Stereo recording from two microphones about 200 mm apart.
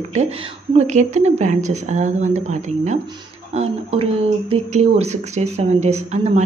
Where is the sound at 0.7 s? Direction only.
35° right (ahead or behind).